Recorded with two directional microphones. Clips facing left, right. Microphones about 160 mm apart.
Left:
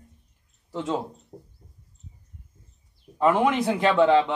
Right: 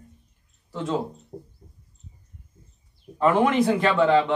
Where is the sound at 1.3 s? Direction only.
15° right (ahead or behind).